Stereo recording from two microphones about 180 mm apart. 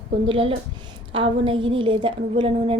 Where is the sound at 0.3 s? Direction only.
30° right (ahead or behind).